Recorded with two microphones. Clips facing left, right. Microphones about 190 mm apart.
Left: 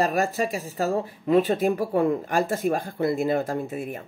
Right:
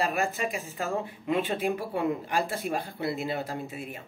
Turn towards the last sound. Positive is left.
turn(degrees=50)  # may be behind; listen again after turning